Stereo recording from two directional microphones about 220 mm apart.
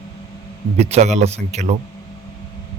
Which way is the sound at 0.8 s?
30° right (ahead or behind).